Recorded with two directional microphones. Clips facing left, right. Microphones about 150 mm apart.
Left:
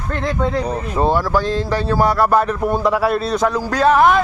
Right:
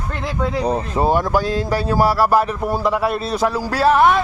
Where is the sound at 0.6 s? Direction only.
30° right (ahead or behind).